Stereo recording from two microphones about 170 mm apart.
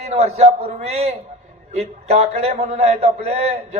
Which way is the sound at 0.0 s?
40° right (ahead or behind).